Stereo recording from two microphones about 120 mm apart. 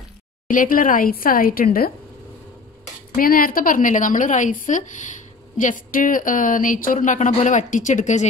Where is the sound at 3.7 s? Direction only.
90° left.